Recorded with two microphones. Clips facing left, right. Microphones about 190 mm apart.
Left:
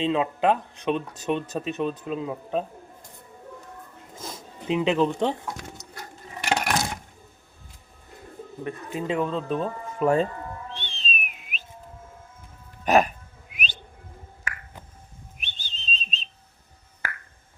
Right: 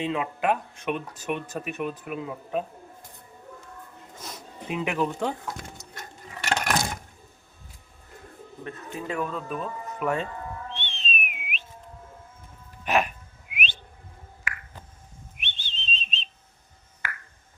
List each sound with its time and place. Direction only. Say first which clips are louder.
0.0 s speech: left 4 dB; 25° left (ahead or behind)
4.7 s speech: left 5 dB; 20° left (ahead or behind)
6.0 s clock: left 1 dB; 10° left (ahead or behind)
8.6 s speech: left 5 dB; 20° left (ahead or behind)
10.8 s whistling: right 1 dB; 35° left (ahead or behind)
12.8 s music: left 5 dB; 40° left (ahead or behind)
13.5 s whistling: right 2 dB; 40° left (ahead or behind)
15.4 s whistle: right 4 dB; 40° left (ahead or behind)
17.0 s finger snapping: left 2 dB; 40° left (ahead or behind)